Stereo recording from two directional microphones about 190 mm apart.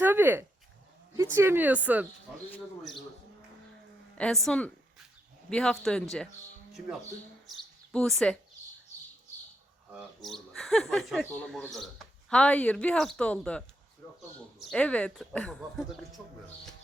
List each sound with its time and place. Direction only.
0.0 s speech: 10° right (ahead or behind)
4.2 s speech: centre (ahead or behind)
7.9 s speech: centre (ahead or behind)
9.9 s speech: centre (ahead or behind)
14.0 s a sound: 15° left (ahead or behind)
14.6 s speech: 5° left (ahead or behind)